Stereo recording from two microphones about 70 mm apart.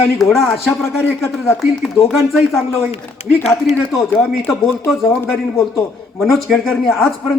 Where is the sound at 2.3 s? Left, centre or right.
Centre.